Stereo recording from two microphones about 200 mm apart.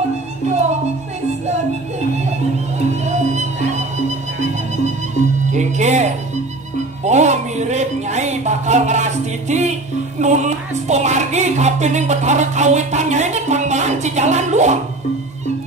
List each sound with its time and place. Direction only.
3.1 s music: 35° right (ahead or behind)
5.5 s music: 35° right (ahead or behind)